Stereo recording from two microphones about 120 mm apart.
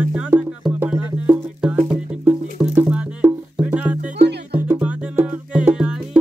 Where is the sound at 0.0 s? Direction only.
10° right (ahead or behind).